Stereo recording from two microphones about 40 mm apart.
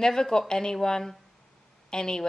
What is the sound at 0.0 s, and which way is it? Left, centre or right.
A woman's voice, centre.